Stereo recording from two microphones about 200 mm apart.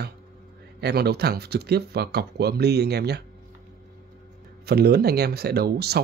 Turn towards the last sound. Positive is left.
turn(degrees=-55)  # may be behind; listen again after turning